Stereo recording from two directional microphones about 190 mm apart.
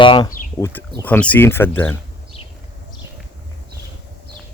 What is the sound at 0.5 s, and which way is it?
Speech, 15° left (ahead or behind).